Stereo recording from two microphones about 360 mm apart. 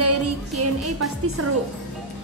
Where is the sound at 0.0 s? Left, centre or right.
Right.